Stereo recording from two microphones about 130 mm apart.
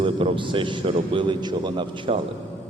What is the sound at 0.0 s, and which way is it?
A man's voice, 40° right (ahead or behind).